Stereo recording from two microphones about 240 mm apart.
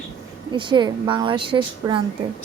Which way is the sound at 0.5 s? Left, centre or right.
Centre.